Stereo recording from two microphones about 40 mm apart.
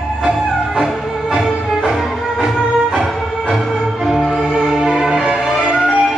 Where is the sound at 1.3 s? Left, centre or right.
Centre.